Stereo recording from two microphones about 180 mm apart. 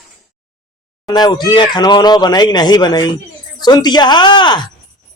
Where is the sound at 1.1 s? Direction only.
25° left (ahead or behind).